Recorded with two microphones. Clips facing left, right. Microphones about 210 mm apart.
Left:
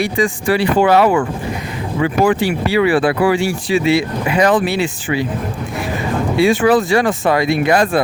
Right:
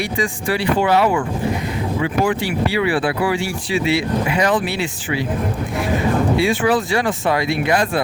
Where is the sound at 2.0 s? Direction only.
85° left.